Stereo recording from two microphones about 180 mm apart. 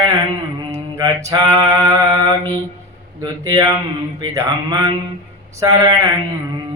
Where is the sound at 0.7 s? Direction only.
20° right (ahead or behind).